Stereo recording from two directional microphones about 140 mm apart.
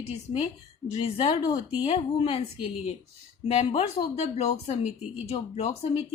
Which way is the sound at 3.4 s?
40° left (ahead or behind).